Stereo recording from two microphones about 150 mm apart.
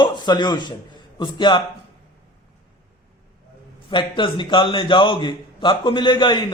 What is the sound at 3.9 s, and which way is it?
A man's voice, 35° left (ahead or behind).